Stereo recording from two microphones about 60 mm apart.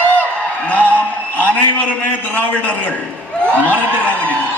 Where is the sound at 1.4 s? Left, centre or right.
Left.